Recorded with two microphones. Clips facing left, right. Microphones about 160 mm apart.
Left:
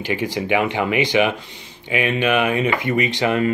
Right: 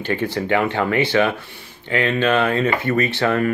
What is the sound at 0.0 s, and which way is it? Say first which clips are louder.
Speech: right 1 dB; 15° left (ahead or behind).